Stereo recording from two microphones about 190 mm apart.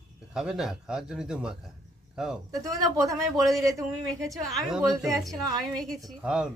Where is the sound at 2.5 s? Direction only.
20° right (ahead or behind).